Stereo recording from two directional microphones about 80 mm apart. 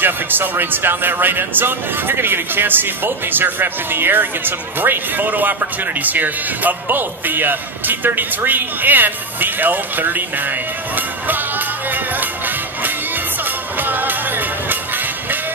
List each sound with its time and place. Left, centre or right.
0.0 s speech: right
11.0 s music: right
13.7 s music: right